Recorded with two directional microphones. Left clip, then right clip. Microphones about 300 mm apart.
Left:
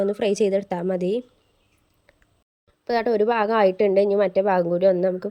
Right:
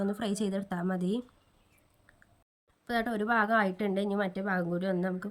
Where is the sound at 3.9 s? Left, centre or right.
Centre.